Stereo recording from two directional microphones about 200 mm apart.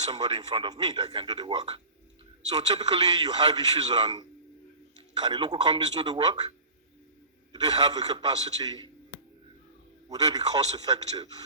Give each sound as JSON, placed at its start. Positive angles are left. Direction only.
{"t": 0.0, "sound": "speech", "side_deg": -20}
{"t": 7.5, "sound": "speech", "side_deg": -20}
{"t": 10.1, "sound": "speech", "side_deg": -20}